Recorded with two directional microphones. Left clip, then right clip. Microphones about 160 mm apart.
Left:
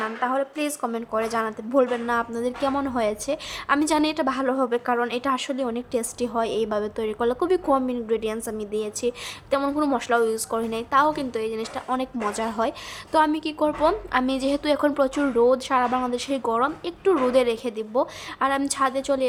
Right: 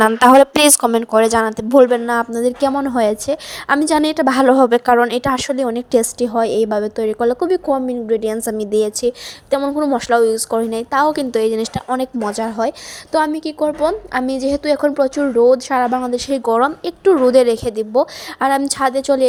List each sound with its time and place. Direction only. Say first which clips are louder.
0.0 s a woman's voice: right 16 dB; 90° right
0.9 s a woman's voice: right 13 dB; 50° right (ahead or behind); by 4.3 s 35° right (ahead or behind)
4.3 s a woman's voice: right 12 dB; 50° right (ahead or behind); by 9.6 s 35° right (ahead or behind)
9.6 s a woman's voice: right 6 dB; 20° right (ahead or behind)
9.9 s a woman's voice: right 10 dB; 35° right (ahead or behind)
11.9 s a woman's voice: right 4 dB; 35° right (ahead or behind)